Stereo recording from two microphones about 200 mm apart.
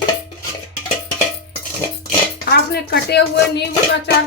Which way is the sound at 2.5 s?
55° left (ahead or behind).